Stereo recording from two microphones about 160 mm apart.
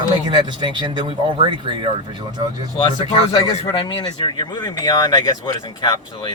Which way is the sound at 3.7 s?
25° left (ahead or behind).